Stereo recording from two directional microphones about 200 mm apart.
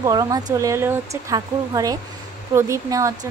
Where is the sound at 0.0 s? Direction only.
20° right (ahead or behind).